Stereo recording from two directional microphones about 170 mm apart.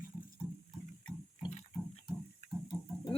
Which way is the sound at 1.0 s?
Centre (ahead or behind).